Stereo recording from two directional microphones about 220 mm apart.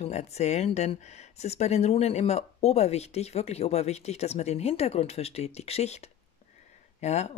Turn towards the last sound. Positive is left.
turn(degrees=30)  # may be behind; listen again after turning